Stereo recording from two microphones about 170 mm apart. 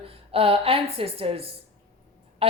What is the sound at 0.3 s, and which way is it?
Speech, 35° right (ahead or behind).